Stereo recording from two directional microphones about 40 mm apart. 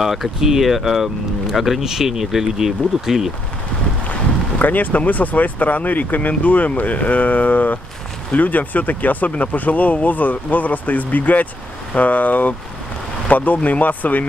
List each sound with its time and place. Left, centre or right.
0.0 s speech: centre
4.6 s speech: left